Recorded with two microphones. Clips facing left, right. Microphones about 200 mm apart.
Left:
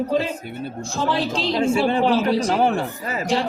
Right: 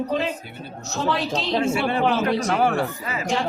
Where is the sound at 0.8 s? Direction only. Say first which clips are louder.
Left 1 dB; 30° left (ahead or behind).